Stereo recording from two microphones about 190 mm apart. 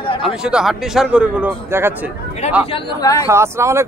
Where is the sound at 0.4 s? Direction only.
5° right (ahead or behind).